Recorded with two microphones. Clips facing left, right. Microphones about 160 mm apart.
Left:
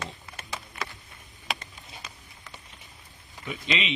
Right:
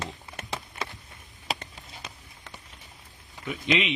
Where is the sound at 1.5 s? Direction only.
35° right (ahead or behind).